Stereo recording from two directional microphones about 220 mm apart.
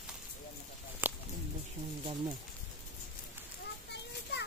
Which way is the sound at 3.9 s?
50° left (ahead or behind).